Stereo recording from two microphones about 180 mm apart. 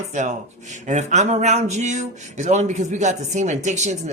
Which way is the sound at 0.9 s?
40° right (ahead or behind).